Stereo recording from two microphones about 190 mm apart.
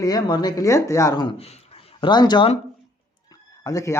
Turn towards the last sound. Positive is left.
turn(degrees=15)  # may be behind; listen again after turning